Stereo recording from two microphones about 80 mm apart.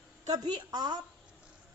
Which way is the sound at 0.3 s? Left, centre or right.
Right.